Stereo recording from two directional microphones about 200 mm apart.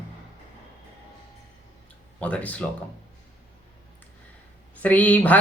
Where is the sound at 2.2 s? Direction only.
5° left (ahead or behind).